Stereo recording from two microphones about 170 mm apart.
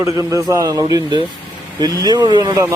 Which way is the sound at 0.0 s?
20° right (ahead or behind).